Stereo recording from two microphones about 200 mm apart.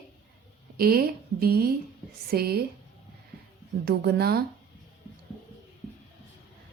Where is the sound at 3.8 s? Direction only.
50° right (ahead or behind).